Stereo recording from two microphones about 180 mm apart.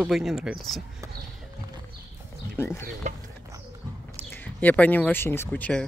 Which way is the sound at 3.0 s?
40° right (ahead or behind).